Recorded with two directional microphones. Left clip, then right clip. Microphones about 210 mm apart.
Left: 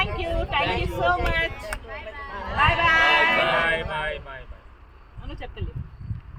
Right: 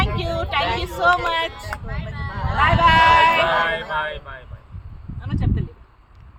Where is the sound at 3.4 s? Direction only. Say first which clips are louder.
Right 3 dB; 20° left (ahead or behind).